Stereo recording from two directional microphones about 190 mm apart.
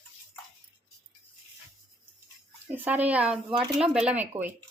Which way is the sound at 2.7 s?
10° right (ahead or behind).